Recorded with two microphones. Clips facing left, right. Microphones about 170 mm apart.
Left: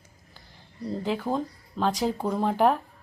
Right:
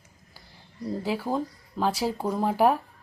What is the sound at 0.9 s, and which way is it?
A woman's voice, 5° right (ahead or behind).